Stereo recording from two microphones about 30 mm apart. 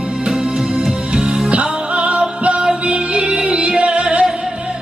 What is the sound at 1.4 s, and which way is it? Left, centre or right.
Music, right.